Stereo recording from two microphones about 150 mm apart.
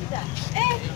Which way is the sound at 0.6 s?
45° right (ahead or behind).